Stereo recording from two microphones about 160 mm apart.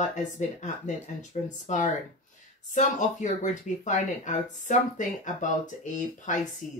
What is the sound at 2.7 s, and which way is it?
Speech, 50° left (ahead or behind).